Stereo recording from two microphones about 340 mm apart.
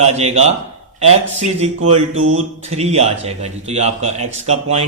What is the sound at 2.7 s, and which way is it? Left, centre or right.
Speech, centre.